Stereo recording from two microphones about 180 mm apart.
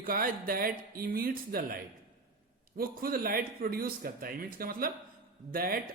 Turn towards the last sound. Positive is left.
turn(degrees=-55)  # may be behind; listen again after turning